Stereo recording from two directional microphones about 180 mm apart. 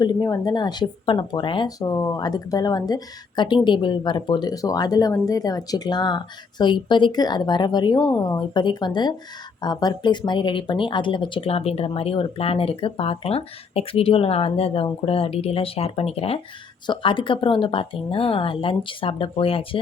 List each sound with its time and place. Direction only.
0.0 s speech: 20° left (ahead or behind)